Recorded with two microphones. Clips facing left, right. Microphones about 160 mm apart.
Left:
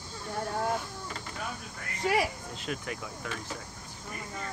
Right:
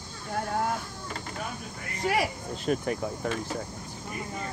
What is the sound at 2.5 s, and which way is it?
Speech, 45° right (ahead or behind).